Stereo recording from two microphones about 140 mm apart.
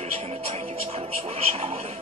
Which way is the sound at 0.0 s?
50° right (ahead or behind).